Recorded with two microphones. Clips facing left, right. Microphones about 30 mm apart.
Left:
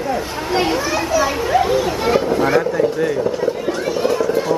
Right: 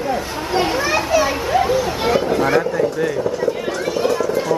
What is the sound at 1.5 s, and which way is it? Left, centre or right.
Children playing, centre.